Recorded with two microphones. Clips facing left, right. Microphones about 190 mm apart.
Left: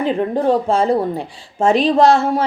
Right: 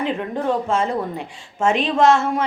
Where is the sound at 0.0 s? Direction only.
35° left (ahead or behind).